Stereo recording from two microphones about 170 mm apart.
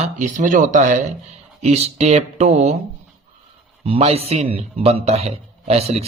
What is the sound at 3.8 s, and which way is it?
Speech, 35° right (ahead or behind).